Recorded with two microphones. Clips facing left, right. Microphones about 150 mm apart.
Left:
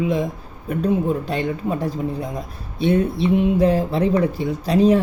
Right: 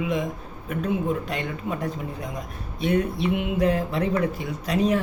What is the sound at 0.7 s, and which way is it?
Speech, 35° left (ahead or behind).